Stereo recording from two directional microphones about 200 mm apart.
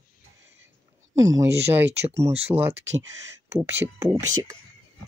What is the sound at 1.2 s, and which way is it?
Speech, 15° right (ahead or behind).